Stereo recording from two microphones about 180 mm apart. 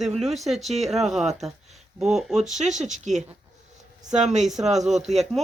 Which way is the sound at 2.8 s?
45° right (ahead or behind).